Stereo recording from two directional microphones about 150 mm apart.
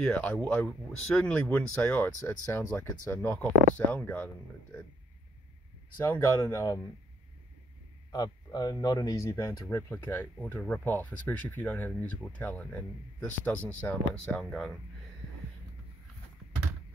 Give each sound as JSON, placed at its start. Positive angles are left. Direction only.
{"t": 0.0, "sound": "speech", "side_deg": 10}
{"t": 6.0, "sound": "speech", "side_deg": 20}
{"t": 8.1, "sound": "speech", "side_deg": 25}